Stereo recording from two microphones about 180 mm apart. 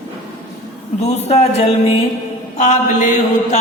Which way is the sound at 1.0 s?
35° left (ahead or behind).